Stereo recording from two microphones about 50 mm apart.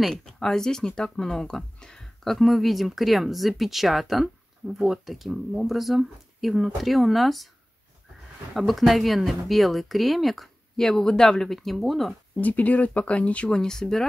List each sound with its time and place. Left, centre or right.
0.0 s speech: centre
2.3 s speech: centre
8.5 s speech: centre
10.9 s speech: centre
12.4 s speech: left
13.6 s speech: centre